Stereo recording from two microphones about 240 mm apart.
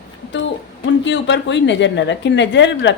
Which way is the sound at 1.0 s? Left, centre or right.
Left.